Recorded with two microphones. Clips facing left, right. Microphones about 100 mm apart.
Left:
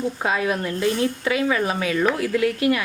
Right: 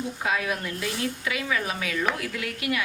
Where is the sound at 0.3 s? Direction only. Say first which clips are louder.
Left 4 dB; 30° left (ahead or behind).